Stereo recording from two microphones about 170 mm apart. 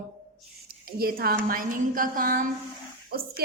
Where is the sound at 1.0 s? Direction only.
60° right (ahead or behind).